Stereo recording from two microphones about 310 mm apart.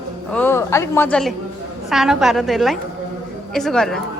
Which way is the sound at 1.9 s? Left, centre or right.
Centre.